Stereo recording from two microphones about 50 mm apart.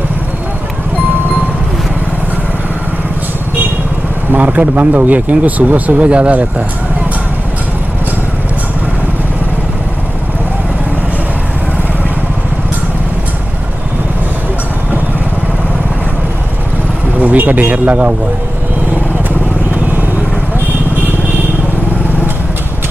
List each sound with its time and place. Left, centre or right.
4.3 s speech: right
17.2 s a man's voice: right